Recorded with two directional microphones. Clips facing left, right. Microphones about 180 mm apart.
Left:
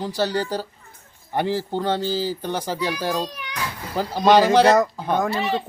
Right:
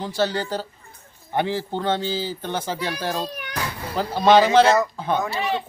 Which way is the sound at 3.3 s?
50° right (ahead or behind).